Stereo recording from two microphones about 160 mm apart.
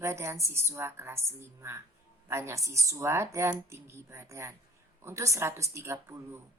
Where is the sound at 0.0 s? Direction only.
15° right (ahead or behind).